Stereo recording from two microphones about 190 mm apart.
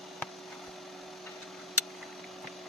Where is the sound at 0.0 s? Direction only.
Centre (ahead or behind).